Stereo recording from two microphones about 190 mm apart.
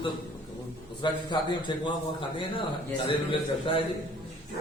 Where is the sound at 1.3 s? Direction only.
25° left (ahead or behind).